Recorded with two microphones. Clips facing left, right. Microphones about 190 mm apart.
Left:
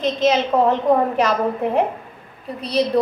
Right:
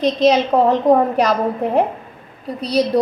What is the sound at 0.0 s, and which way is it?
A woman's voice, 35° right (ahead or behind).